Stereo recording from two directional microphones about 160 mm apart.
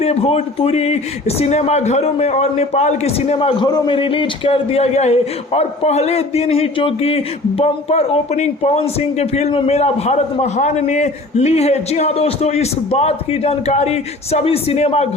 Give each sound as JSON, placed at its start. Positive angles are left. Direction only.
{"t": 0.0, "sound": "a man's voice", "side_deg": 40}